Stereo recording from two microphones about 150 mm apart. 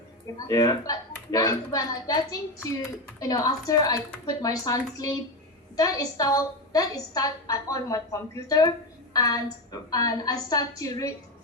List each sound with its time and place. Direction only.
0.3 s a woman's voice: 25° left (ahead or behind)